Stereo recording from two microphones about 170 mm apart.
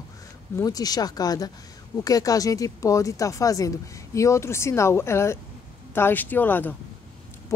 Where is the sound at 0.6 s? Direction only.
20° left (ahead or behind).